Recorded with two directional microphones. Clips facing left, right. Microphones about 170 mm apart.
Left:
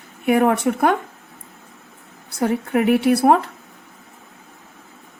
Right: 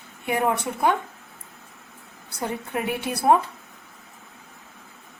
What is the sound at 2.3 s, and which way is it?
Speech, 70° left (ahead or behind).